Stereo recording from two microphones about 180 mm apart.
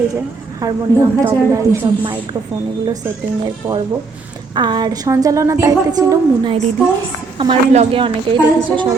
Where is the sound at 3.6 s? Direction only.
15° right (ahead or behind).